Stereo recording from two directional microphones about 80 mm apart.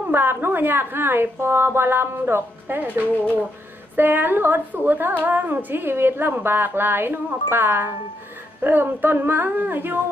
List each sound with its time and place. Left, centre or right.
0.0 s a woman's voice: right